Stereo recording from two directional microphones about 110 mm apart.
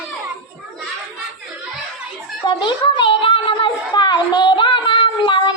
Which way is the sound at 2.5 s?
50° left (ahead or behind).